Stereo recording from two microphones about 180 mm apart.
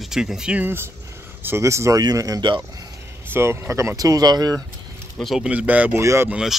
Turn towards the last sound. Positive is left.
turn(degrees=-5)  # may be behind; listen again after turning